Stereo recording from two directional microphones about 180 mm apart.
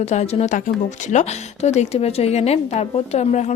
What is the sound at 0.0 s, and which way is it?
A woman's voice, 40° left (ahead or behind).